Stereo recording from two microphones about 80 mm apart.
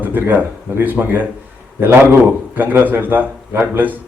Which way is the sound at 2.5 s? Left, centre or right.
Right.